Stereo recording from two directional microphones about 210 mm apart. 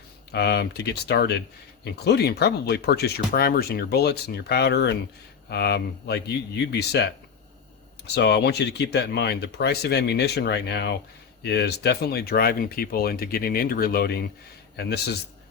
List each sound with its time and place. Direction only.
0.3 s speech: 50° left (ahead or behind)